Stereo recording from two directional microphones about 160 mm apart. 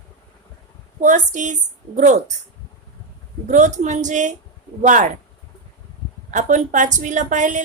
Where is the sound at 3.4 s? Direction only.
50° right (ahead or behind).